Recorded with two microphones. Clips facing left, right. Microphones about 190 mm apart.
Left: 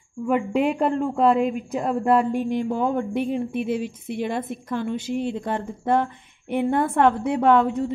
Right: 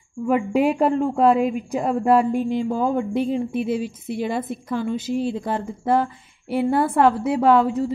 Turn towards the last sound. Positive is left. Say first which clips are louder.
# right 1 dB
turn(degrees=-5)  # may be behind; listen again after turning